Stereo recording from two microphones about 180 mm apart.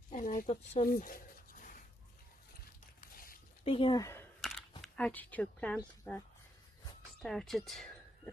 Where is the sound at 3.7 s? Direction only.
30° left (ahead or behind).